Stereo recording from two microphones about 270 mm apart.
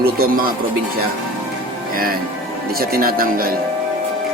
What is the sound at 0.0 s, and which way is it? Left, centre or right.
Speech, right.